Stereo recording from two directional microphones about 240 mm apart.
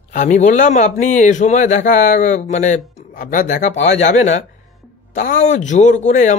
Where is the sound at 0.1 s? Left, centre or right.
Left.